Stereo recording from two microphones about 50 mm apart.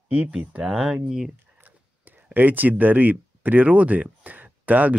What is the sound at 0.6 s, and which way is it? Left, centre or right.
Speech, centre.